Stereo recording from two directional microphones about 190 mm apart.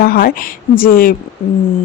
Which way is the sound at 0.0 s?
50° left (ahead or behind).